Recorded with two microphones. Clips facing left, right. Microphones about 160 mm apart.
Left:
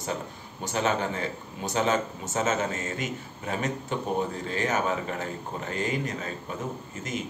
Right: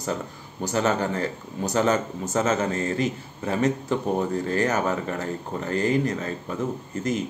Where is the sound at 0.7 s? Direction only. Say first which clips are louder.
Right 3 dB; 45° right (ahead or behind).